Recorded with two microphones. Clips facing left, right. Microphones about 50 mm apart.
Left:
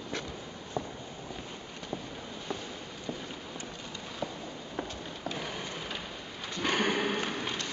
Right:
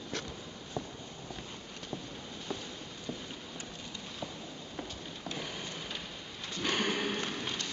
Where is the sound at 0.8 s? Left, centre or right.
Left.